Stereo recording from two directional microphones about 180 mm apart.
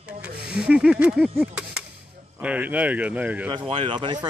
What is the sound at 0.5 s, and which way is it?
Speech, 5° right (ahead or behind).